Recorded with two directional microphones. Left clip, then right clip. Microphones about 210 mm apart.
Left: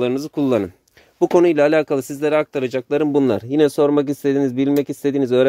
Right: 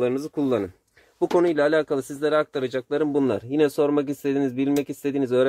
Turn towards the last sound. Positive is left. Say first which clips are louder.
# left 5 dB
turn(degrees=30)  # may be behind; listen again after turning